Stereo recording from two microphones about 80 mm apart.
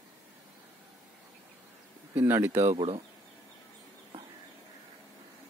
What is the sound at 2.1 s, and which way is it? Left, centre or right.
Speech, right.